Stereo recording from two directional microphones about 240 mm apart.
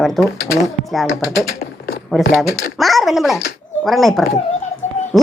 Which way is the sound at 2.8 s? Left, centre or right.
Centre.